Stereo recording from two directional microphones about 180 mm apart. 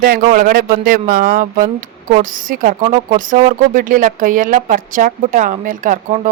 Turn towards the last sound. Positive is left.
turn(degrees=-45)  # may be behind; listen again after turning